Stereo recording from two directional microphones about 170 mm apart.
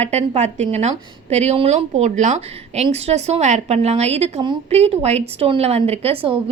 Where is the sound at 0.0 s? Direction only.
40° right (ahead or behind).